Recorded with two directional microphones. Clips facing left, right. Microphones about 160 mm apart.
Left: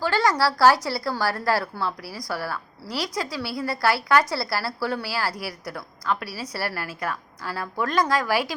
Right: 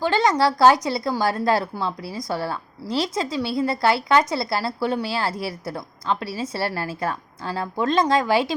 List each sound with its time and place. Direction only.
0.0 s a woman's voice: 20° right (ahead or behind)